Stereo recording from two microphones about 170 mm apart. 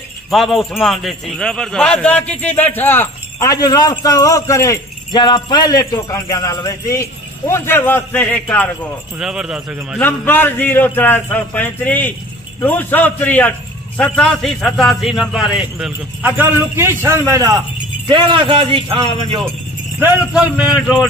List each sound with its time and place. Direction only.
0.3 s a man's voice: centre (ahead or behind)
9.2 s a man's voice: 5° right (ahead or behind)
9.9 s a man's voice: 10° left (ahead or behind); by 17.5 s 15° right (ahead or behind)
18.0 s speech: 30° right (ahead or behind)
20.0 s a man's voice: 10° right (ahead or behind)